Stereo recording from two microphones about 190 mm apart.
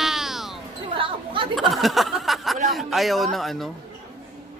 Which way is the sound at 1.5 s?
Centre (ahead or behind).